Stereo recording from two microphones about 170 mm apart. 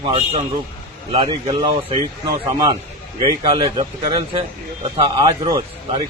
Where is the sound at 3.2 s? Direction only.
35° right (ahead or behind).